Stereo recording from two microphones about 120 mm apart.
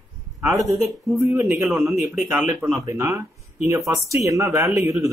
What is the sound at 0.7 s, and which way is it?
Speech, 20° right (ahead or behind).